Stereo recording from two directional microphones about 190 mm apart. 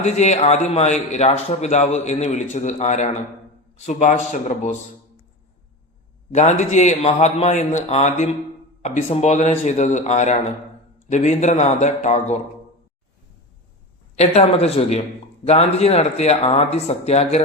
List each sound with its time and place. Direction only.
0.0 s speech: 35° left (ahead or behind)
6.3 s speech: 35° left (ahead or behind)
14.2 s speech: 35° left (ahead or behind)